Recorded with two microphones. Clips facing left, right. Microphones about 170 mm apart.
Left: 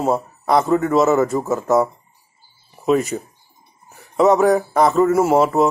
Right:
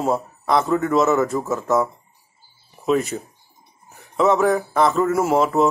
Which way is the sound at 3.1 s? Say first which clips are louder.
Left 3 dB; 10° left (ahead or behind).